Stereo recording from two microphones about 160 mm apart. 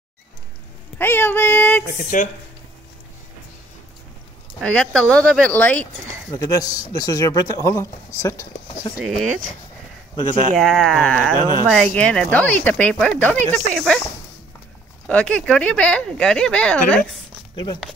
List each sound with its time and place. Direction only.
0.9 s speech: 15° left (ahead or behind)
2.0 s speech: 50° left (ahead or behind)
4.6 s speech: 5° left (ahead or behind)
6.3 s speech: 20° left (ahead or behind)
8.9 s speech: centre (ahead or behind)
10.6 s speech: centre (ahead or behind)
15.0 s speech: 5° left (ahead or behind)